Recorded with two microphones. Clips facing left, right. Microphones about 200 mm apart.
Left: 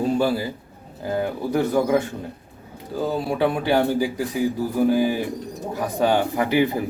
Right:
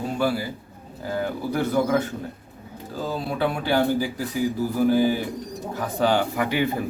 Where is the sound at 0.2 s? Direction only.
25° left (ahead or behind).